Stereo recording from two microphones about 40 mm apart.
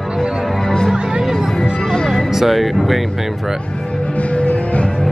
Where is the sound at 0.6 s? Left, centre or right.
Centre.